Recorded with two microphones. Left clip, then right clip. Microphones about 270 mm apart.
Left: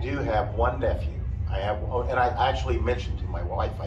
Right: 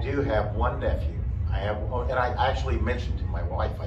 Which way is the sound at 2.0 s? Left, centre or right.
Left.